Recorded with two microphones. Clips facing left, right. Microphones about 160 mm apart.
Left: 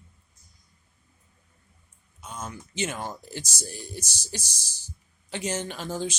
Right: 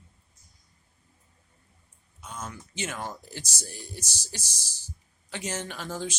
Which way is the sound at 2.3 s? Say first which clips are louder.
Left 3 dB; 20° left (ahead or behind).